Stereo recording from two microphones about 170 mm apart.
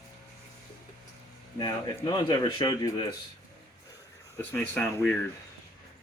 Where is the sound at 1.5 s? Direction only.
25° left (ahead or behind).